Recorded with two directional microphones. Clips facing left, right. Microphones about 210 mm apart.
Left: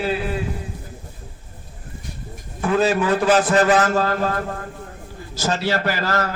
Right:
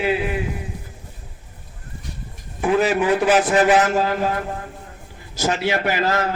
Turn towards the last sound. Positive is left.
turn(degrees=-20)  # may be behind; listen again after turning